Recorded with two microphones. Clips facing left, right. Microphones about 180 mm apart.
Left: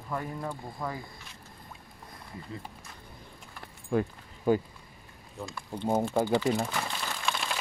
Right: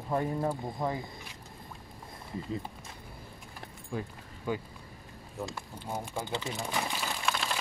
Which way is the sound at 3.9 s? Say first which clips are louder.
Left 9 dB; 65° left (ahead or behind).